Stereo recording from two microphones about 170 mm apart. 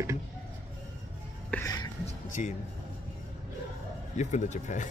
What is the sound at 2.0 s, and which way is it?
Speech, 45° left (ahead or behind).